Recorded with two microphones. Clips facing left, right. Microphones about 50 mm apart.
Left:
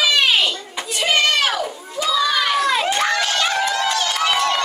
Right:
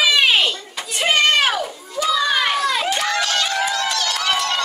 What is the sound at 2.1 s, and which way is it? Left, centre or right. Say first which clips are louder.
Crowd: left 1 dB; right.